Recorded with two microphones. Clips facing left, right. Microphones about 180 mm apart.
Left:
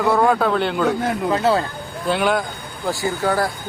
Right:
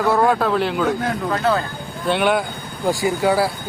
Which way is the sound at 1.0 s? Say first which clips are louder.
Left 2 dB; 20° left (ahead or behind).